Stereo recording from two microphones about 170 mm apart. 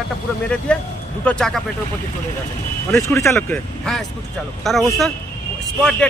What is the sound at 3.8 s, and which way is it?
A man's voice, centre (ahead or behind).